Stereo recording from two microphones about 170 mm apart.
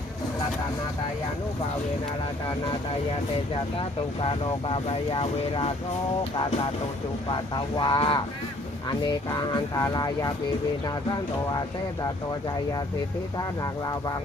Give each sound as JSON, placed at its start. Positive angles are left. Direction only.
{"t": 3.8, "sound": "speech", "side_deg": 30}
{"t": 7.3, "sound": "speech", "side_deg": 25}